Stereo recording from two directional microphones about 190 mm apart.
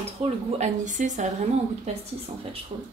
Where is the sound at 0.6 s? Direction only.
40° right (ahead or behind).